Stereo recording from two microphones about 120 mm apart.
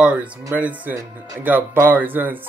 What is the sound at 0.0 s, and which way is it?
Speech, 10° right (ahead or behind).